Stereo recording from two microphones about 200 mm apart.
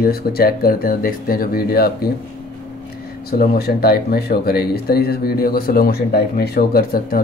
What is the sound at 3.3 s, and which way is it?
Speech, 50° left (ahead or behind).